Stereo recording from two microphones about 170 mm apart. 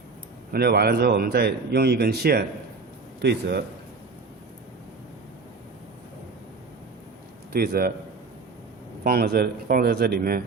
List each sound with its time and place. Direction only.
0.5 s speech: 65° right (ahead or behind)
3.2 s a man's voice: 80° right
7.5 s speech: 65° right (ahead or behind)
9.0 s speech: 65° right (ahead or behind)